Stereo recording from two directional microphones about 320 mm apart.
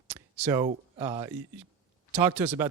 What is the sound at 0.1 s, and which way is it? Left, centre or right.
A man's voice, centre.